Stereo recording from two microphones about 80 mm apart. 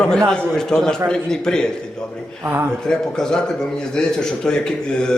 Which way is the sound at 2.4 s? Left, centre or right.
Right.